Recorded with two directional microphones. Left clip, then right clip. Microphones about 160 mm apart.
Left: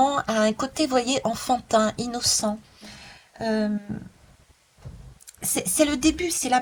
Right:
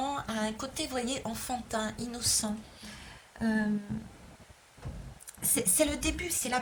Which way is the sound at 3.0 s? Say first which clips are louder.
Left 7 dB; 30° left (ahead or behind).